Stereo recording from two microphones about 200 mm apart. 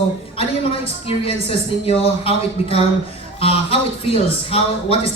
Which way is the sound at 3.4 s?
30° left (ahead or behind).